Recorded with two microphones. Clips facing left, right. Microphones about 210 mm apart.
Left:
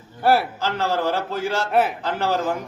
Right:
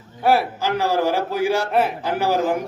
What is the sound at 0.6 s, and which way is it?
A man's voice, 15° right (ahead or behind).